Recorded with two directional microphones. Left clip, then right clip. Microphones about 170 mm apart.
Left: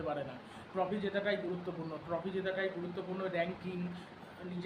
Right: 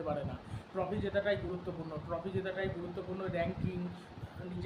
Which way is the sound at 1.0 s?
Centre (ahead or behind).